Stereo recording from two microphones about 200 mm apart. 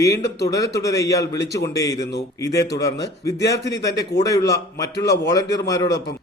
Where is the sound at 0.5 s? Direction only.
15° left (ahead or behind).